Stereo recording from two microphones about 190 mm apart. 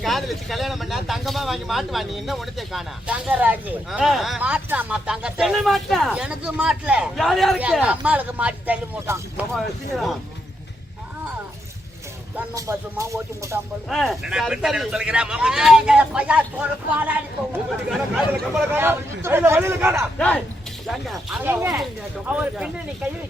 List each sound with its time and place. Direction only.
0.0 s speech: centre (ahead or behind)
9.6 s speech: centre (ahead or behind)
12.4 s speech: 15° right (ahead or behind)
13.9 s speech: centre (ahead or behind)
17.8 s speech: 10° right (ahead or behind)
20.1 s speech: 5° left (ahead or behind)